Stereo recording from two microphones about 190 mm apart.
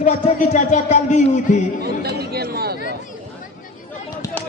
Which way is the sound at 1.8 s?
55° right (ahead or behind).